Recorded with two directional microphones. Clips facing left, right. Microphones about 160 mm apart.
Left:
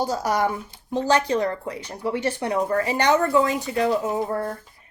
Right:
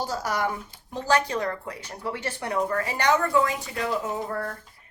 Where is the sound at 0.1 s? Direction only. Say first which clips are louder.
Left 5 dB; 20° left (ahead or behind).